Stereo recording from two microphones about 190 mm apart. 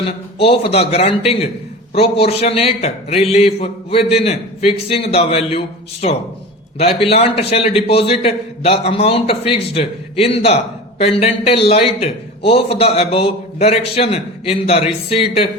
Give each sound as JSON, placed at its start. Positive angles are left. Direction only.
{"t": 0.0, "sound": "a man's voice", "side_deg": 30}